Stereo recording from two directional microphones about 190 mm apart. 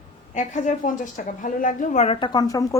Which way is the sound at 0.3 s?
40° left (ahead or behind).